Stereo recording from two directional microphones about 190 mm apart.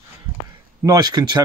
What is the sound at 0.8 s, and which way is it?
Speech, 20° right (ahead or behind).